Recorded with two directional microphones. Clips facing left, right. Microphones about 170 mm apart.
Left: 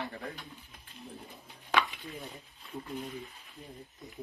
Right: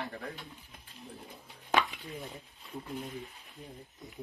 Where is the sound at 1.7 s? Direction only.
45° right (ahead or behind).